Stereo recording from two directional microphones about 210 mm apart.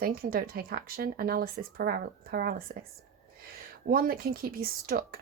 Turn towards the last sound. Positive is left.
turn(degrees=-45)  # may be behind; listen again after turning